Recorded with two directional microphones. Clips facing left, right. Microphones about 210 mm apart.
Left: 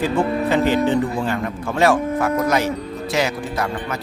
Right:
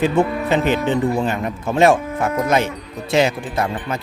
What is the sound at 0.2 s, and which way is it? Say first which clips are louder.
Speech: right 1 dB; 25° right (ahead or behind).